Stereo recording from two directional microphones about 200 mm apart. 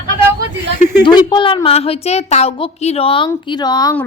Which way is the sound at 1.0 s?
25° left (ahead or behind).